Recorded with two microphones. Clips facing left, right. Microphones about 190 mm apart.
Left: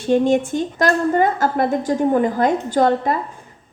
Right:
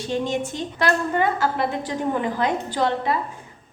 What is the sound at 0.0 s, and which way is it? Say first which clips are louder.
A woman's voice: left 9 dB; 55° left (ahead or behind).